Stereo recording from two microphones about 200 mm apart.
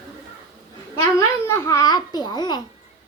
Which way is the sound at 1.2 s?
15° left (ahead or behind).